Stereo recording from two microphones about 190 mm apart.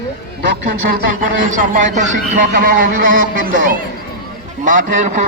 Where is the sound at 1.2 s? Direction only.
45° right (ahead or behind).